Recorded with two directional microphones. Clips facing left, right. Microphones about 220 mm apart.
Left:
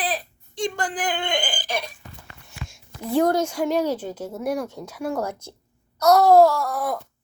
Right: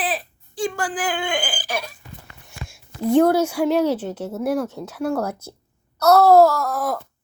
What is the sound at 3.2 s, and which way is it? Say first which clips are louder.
Speech: right 4 dB; 5° right (ahead or behind).